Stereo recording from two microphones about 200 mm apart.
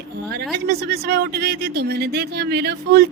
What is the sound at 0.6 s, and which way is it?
Speech, 50° right (ahead or behind).